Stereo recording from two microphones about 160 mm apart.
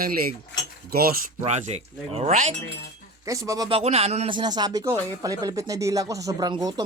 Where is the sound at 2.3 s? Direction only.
50° right (ahead or behind).